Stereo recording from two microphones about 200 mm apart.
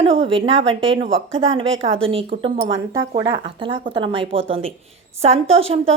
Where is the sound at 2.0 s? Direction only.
25° right (ahead or behind).